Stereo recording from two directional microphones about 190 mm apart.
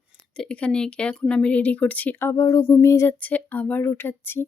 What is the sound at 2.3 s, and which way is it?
Speech, 20° left (ahead or behind).